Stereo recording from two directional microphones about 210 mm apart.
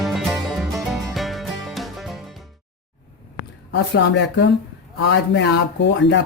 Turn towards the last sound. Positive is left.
turn(degrees=55)  # may be behind; listen again after turning